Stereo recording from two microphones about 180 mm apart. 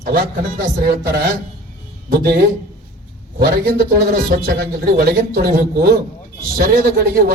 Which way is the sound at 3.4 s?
60° right (ahead or behind).